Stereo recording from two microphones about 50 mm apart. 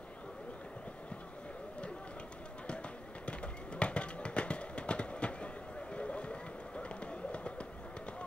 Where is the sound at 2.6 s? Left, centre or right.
Left.